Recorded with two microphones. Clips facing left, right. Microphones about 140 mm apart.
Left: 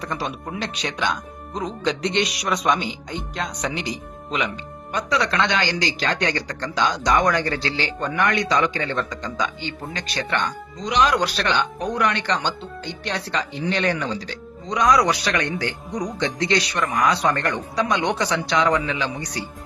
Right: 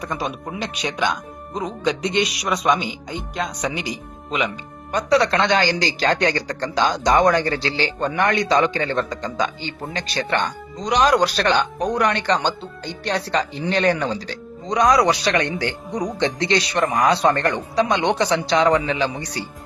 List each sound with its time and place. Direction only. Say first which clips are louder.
0.0 s speech: right 2 dB; 10° right (ahead or behind)
4.9 s speech: right 5 dB; 35° right (ahead or behind)